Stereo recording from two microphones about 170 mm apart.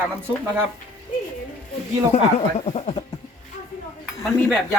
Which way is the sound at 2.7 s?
35° left (ahead or behind).